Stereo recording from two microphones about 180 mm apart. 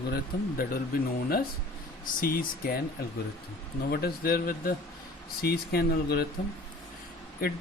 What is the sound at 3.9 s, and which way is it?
Speech, 60° left (ahead or behind).